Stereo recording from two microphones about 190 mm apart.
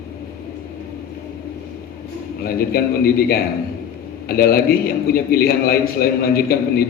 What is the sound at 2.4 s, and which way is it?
A man's voice, 55° left (ahead or behind).